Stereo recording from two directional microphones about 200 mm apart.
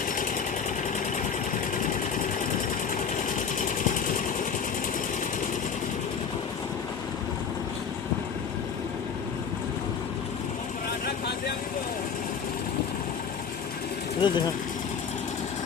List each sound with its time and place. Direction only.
1.7 s engine: 40° left (ahead or behind)
14.2 s vehicle: 20° left (ahead or behind)